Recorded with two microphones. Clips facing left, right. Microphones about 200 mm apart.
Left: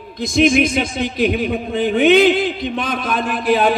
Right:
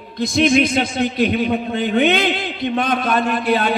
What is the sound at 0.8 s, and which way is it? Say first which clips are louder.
A man's voice: right 1 dB; 60° right (ahead or behind).